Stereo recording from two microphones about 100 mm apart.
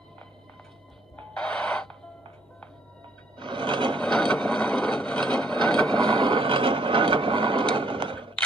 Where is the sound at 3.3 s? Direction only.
50° right (ahead or behind).